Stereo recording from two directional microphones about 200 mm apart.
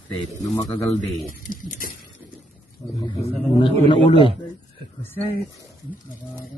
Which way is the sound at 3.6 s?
25° left (ahead or behind).